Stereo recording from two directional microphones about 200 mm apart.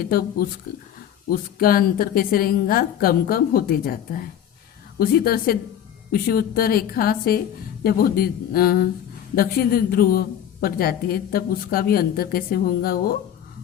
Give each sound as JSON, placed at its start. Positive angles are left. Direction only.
{"t": 0.0, "sound": "a woman's voice", "side_deg": 50}